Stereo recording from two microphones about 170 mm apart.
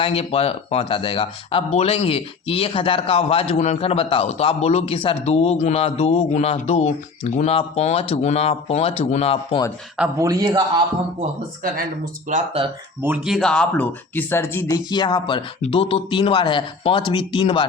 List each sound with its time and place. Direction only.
0.0 s speech: 35° left (ahead or behind)
10.2 s a man's voice: 20° right (ahead or behind)
12.3 s speech: 50° right (ahead or behind)
13.0 s speech: 5° right (ahead or behind); by 14.8 s 15° left (ahead or behind)
14.8 s speech: 25° left (ahead or behind)